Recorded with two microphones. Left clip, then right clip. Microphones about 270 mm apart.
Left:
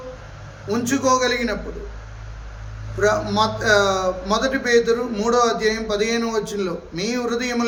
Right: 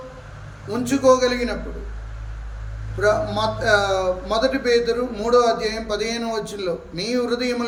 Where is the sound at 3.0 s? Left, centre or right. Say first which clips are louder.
Left 1 dB; centre.